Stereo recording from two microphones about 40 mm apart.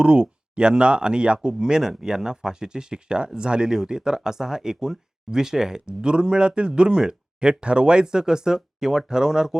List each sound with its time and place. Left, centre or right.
0.0 s speech: right